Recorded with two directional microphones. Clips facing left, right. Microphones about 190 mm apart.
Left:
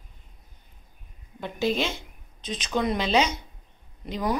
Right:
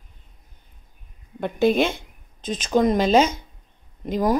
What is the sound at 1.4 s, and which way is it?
Speech, 55° right (ahead or behind).